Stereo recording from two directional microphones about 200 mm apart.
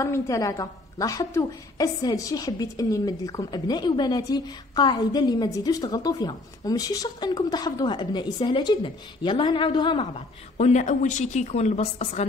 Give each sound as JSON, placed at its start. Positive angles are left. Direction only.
{"t": 0.0, "sound": "a woman's voice", "side_deg": 15}